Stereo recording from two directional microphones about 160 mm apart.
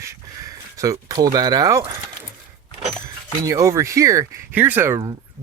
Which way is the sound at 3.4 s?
20° right (ahead or behind).